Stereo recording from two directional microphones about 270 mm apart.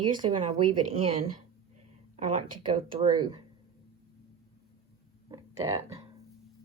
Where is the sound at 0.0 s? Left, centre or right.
Centre.